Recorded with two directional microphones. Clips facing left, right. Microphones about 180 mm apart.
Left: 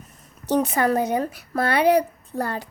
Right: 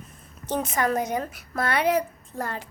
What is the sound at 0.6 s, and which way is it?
A woman's voice, 35° left (ahead or behind).